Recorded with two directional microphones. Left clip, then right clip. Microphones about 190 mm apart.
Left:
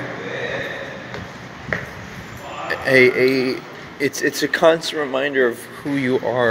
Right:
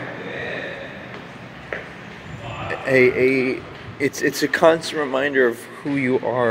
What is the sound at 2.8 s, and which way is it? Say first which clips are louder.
Speech: left 2 dB; 5° right (ahead or behind).